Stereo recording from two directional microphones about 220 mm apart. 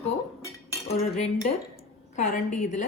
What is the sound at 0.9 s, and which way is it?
Cutlery, 30° left (ahead or behind).